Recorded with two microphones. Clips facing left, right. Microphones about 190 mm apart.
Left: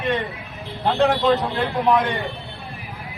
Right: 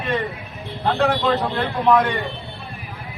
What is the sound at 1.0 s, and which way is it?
A man's voice, 20° left (ahead or behind).